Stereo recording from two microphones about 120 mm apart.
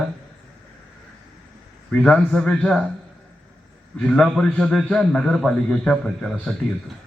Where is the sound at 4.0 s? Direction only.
5° left (ahead or behind).